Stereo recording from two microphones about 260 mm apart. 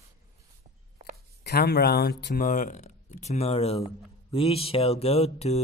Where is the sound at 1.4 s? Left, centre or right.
Left.